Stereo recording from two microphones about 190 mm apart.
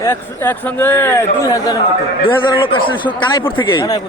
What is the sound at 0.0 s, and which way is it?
A man's voice, 15° left (ahead or behind).